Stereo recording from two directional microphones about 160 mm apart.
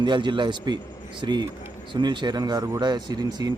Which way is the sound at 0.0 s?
30° right (ahead or behind).